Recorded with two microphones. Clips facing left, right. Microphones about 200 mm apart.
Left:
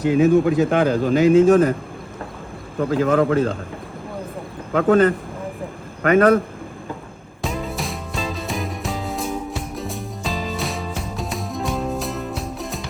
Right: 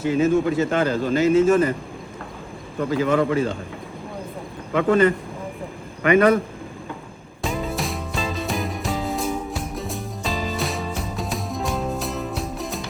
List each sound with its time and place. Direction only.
0.0 s a man's voice: centre (ahead or behind)
2.9 s a man's voice: 5° right (ahead or behind)
4.7 s a man's voice: centre (ahead or behind)
7.4 s music: centre (ahead or behind)